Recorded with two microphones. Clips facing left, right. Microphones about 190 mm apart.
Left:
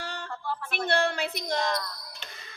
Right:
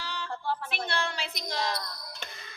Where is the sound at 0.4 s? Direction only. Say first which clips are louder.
Right 2 dB; 30° right (ahead or behind).